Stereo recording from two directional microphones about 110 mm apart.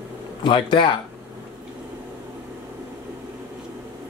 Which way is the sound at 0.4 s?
45° left (ahead or behind).